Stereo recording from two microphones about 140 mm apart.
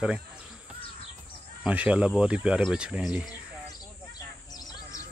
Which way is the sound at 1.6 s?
10° right (ahead or behind).